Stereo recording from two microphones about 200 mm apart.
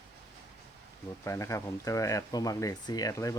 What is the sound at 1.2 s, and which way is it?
Speech, 15° left (ahead or behind).